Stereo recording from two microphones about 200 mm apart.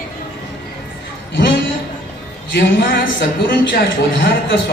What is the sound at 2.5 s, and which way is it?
A man's voice, 55° left (ahead or behind).